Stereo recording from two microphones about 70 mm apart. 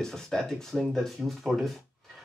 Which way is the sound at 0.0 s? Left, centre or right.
Centre.